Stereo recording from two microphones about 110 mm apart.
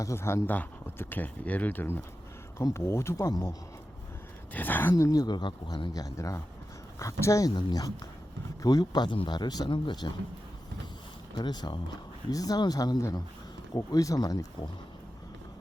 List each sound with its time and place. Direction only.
0.0 s speech: 25° left (ahead or behind)
4.5 s speech: 15° left (ahead or behind); by 10.1 s 45° left (ahead or behind)
11.3 s speech: 40° left (ahead or behind)